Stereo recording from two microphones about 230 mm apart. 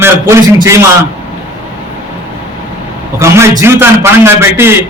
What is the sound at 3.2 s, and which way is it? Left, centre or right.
A man's voice, centre.